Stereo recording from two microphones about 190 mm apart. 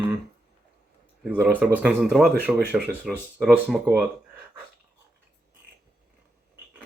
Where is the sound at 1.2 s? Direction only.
10° right (ahead or behind).